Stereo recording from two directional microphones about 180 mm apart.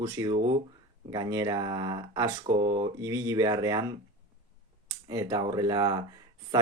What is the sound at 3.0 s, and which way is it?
Speech, 20° right (ahead or behind).